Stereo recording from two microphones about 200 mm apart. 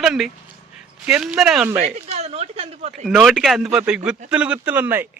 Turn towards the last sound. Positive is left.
turn(degrees=-10)  # may be behind; listen again after turning